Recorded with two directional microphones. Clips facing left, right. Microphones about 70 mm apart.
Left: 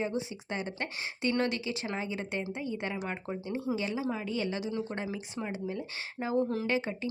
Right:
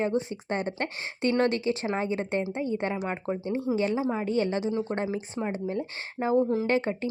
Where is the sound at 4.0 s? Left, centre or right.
Right.